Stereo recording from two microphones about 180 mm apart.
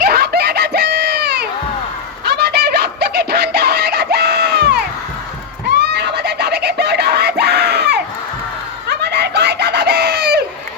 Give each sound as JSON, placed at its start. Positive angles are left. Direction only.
{"t": 0.0, "sound": "a sound", "side_deg": -60}
{"t": 2.2, "sound": "music", "side_deg": -65}
{"t": 5.7, "sound": "screaming", "side_deg": -65}
{"t": 8.9, "sound": "chicken", "side_deg": -70}